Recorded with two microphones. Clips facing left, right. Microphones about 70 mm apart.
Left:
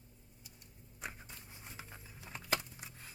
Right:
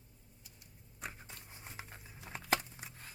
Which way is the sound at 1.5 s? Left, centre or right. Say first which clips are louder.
Right 2 dB; right.